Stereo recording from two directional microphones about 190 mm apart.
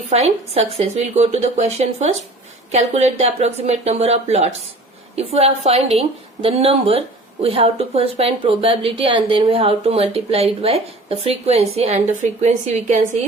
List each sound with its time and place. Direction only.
0.1 s a woman's voice: 35° right (ahead or behind)